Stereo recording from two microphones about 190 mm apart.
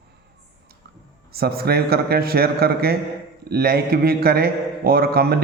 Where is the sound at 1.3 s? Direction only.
55° right (ahead or behind).